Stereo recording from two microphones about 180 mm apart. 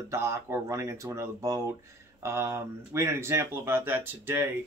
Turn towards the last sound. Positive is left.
turn(degrees=-10)  # may be behind; listen again after turning